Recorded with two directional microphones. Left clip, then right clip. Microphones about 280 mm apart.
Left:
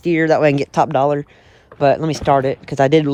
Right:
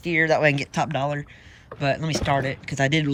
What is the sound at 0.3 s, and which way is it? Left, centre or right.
Speech, centre.